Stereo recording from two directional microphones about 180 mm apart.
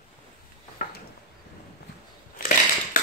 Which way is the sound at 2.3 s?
50° left (ahead or behind).